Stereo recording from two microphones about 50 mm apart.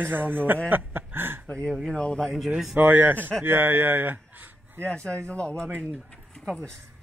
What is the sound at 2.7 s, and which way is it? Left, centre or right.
A man's voice, right.